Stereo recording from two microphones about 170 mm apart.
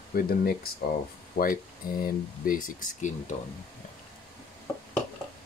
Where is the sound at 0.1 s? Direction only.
60° left (ahead or behind).